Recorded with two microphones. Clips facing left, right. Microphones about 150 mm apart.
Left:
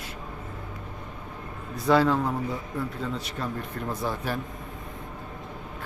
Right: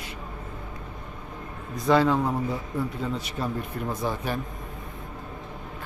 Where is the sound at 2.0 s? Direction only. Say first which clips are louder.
Right 1 dB; 10° right (ahead or behind).